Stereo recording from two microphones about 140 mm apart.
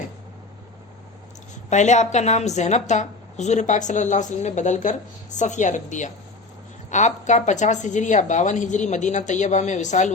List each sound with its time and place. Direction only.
1.7 s a woman's voice: 55° left (ahead or behind)